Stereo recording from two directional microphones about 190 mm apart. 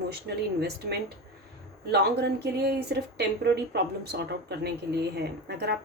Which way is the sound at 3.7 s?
60° right (ahead or behind).